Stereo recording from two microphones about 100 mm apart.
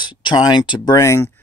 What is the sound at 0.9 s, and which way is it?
Speech, 30° left (ahead or behind).